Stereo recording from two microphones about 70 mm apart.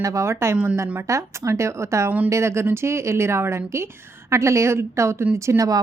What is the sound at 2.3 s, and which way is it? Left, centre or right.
A woman's voice, right.